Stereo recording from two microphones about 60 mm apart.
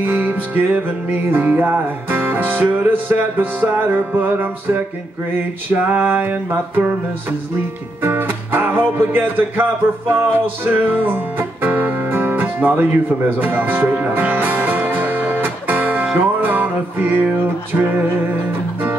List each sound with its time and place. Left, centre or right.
0.0 s music: right